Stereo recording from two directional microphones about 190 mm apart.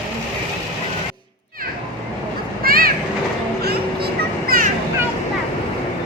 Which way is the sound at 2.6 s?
50° right (ahead or behind).